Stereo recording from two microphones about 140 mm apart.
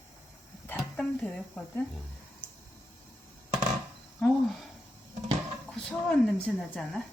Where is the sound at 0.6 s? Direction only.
10° left (ahead or behind).